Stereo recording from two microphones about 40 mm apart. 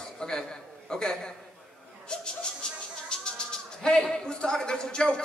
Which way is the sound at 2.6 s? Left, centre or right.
Centre.